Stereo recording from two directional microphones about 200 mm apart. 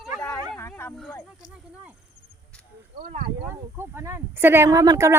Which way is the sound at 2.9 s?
45° right (ahead or behind).